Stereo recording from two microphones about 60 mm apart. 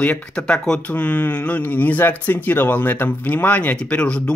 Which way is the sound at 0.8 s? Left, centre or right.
Left.